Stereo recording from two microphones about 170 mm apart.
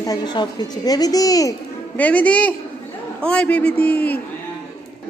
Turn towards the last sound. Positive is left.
turn(degrees=10)  # may be behind; listen again after turning